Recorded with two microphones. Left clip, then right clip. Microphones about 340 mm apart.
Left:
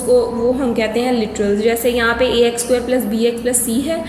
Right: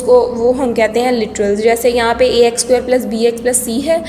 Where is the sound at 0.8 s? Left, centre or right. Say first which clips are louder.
Right 4 dB; centre.